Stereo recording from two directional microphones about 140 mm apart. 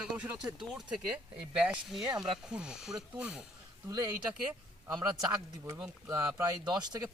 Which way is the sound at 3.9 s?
25° right (ahead or behind).